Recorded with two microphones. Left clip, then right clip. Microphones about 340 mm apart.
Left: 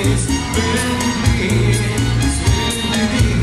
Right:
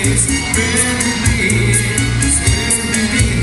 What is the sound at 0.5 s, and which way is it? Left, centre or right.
Music, left.